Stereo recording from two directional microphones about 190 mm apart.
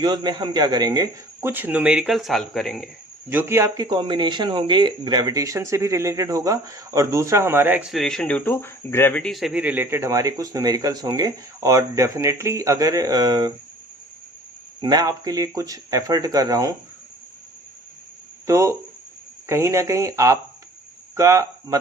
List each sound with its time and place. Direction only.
0.0 s speech: 20° right (ahead or behind); by 2.9 s centre (ahead or behind)
3.2 s speech: 10° right (ahead or behind)
14.8 s speech: 20° right (ahead or behind)
18.4 s speech: 15° right (ahead or behind)